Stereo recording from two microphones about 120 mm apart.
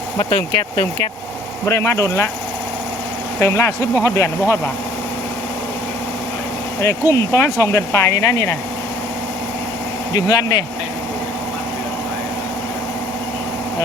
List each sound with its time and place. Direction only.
0.3 s speech: 40° left (ahead or behind)
1.6 s speech: 20° left (ahead or behind)
3.4 s speech: 25° left (ahead or behind)
6.8 s speech: 25° left (ahead or behind)
10.1 s speech: 30° left (ahead or behind)